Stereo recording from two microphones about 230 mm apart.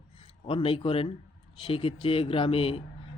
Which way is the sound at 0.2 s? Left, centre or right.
Left.